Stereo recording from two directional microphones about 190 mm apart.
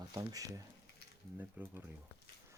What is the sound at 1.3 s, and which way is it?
Cutlery, 10° right (ahead or behind).